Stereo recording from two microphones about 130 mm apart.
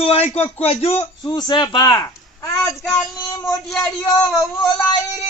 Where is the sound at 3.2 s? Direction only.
25° left (ahead or behind).